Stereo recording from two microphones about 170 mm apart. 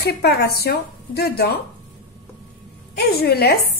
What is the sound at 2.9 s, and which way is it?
Speech, 65° left (ahead or behind).